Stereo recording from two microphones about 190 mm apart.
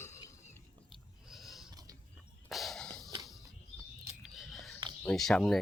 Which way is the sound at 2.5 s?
Centre (ahead or behind).